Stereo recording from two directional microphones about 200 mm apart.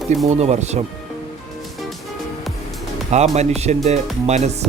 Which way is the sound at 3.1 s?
35° right (ahead or behind).